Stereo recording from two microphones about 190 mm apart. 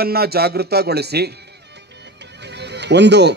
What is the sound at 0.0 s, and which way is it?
A man's voice, 55° right (ahead or behind).